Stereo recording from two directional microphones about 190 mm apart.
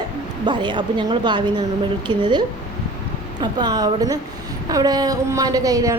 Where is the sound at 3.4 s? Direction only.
20° right (ahead or behind).